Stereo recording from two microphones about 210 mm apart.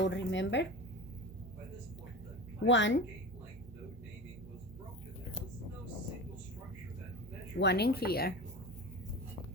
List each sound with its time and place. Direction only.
0.0 s speech: 60° left (ahead or behind)
2.6 s speech: 60° left (ahead or behind)
7.6 s speech: 50° left (ahead or behind)